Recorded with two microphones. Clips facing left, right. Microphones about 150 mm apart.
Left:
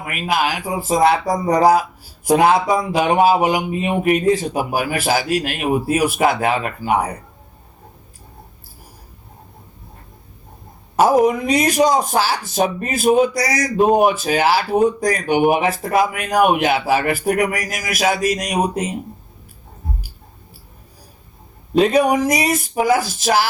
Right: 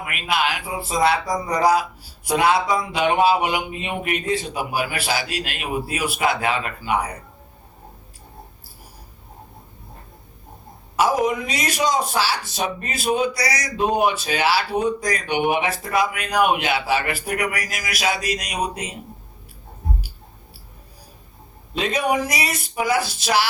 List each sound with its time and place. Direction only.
0.0 s speech: 40° left (ahead or behind)
10.9 s speech: 45° left (ahead or behind)
21.8 s speech: 40° left (ahead or behind)